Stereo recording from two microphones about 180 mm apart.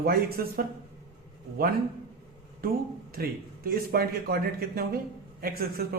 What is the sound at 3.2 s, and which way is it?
Speech, 55° right (ahead or behind).